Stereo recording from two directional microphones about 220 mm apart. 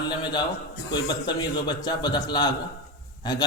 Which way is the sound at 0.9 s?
20° left (ahead or behind).